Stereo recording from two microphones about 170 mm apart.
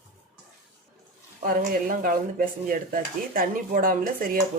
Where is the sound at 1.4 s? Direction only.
55° right (ahead or behind).